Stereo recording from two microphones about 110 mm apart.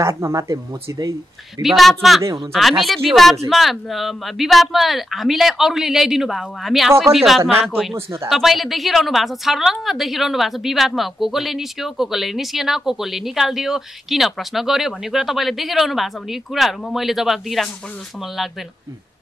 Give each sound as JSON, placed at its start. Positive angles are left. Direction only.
{"t": 0.0, "sound": "speech", "side_deg": -25}
{"t": 1.6, "sound": "speech", "side_deg": 0}